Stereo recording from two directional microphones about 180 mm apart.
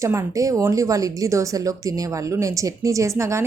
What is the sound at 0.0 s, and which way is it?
Speech, 15° right (ahead or behind).